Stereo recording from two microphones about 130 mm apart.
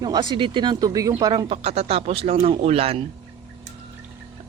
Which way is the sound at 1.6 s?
55° right (ahead or behind).